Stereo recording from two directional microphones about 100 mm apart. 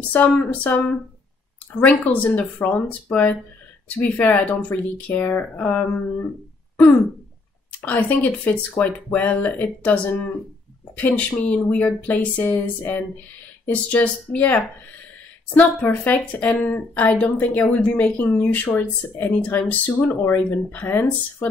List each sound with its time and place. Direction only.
0.3 s a woman's voice: 15° left (ahead or behind)
7.8 s a woman's voice: 15° left (ahead or behind)